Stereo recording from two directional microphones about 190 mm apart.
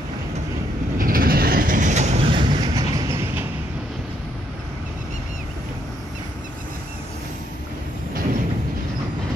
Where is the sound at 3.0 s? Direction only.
15° right (ahead or behind).